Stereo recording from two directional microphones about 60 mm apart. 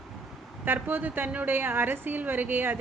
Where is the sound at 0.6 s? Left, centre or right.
Right.